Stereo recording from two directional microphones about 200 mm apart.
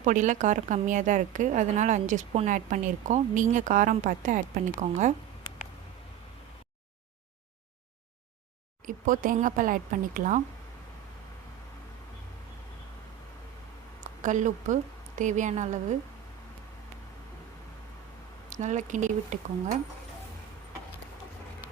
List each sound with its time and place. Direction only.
0.0 s a woman's voice: 40° right (ahead or behind)
8.9 s a woman's voice: 40° right (ahead or behind)
14.2 s a woman's voice: 40° right (ahead or behind)
18.4 s a woman's voice: 35° right (ahead or behind)